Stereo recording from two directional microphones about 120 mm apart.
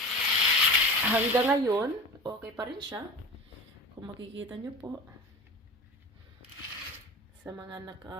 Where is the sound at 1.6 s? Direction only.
30° right (ahead or behind).